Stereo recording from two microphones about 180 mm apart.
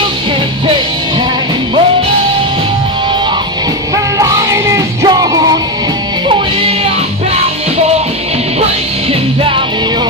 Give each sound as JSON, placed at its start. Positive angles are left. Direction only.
{"t": 3.9, "sound": "music", "side_deg": -20}